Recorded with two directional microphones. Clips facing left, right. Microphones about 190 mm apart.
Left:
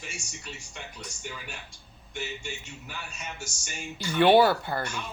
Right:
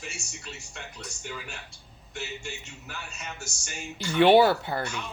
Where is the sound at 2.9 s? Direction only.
10° left (ahead or behind).